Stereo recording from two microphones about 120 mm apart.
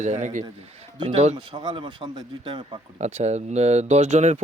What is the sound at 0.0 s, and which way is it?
Speech, 90° right.